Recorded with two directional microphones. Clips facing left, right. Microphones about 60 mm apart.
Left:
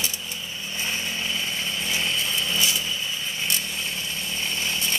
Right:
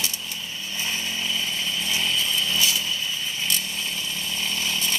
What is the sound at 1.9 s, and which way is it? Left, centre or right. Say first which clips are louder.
Chainsaw: right 1 dB; left.